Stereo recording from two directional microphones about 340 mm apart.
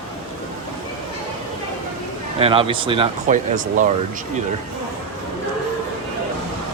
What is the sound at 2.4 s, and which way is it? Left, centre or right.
Speech, centre.